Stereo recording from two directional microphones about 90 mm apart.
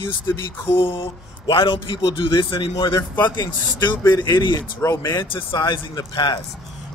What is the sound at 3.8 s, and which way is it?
Speech, 50° left (ahead or behind).